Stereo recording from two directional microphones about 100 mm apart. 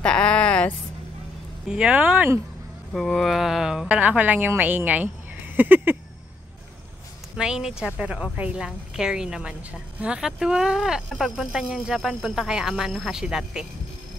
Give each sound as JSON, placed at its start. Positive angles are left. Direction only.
{"t": 0.0, "sound": "a sound", "side_deg": 10}
{"t": 1.7, "sound": "a woman's voice", "side_deg": -10}
{"t": 2.9, "sound": "mantra", "side_deg": 5}
{"t": 3.9, "sound": "a woman's voice", "side_deg": -15}
{"t": 7.3, "sound": "a woman's voice", "side_deg": -5}